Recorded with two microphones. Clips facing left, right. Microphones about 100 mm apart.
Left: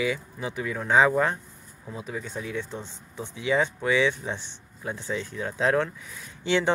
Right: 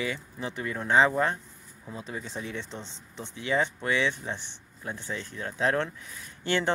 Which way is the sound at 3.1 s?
15° left (ahead or behind).